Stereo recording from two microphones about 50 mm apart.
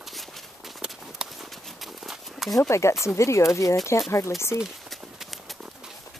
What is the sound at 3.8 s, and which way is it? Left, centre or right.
Speech, left.